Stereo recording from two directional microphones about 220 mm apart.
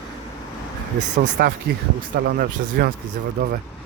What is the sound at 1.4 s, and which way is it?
Speech, 40° right (ahead or behind).